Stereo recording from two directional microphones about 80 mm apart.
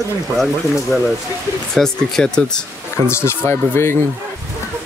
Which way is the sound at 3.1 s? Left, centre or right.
Left.